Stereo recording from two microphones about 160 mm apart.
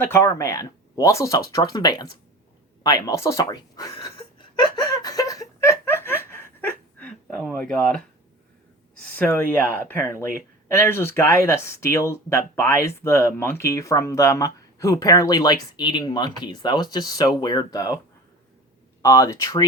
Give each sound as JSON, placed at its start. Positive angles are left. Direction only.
{"t": 0.0, "sound": "speech", "side_deg": 15}
{"t": 2.8, "sound": "a sound", "side_deg": 20}
{"t": 9.0, "sound": "speech", "side_deg": 10}
{"t": 19.0, "sound": "speech", "side_deg": 20}